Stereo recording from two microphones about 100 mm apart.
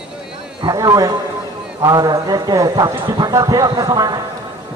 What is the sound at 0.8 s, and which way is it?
A man's voice, 40° right (ahead or behind).